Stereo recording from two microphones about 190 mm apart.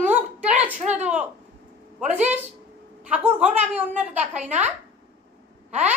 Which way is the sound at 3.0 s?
5° right (ahead or behind).